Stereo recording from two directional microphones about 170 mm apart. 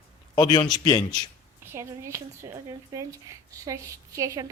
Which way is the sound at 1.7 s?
15° right (ahead or behind).